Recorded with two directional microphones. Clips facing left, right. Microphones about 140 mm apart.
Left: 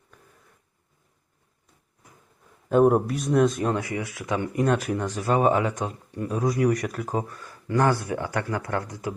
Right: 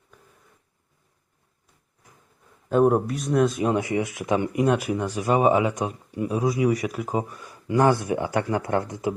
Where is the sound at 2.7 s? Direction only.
Centre (ahead or behind).